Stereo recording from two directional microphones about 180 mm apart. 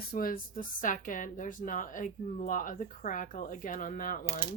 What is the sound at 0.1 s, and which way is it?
Speech, 55° left (ahead or behind).